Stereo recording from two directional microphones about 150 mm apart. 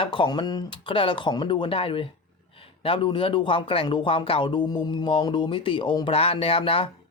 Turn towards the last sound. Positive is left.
turn(degrees=40)  # may be behind; listen again after turning